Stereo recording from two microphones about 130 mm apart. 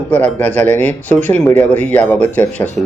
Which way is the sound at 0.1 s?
10° left (ahead or behind).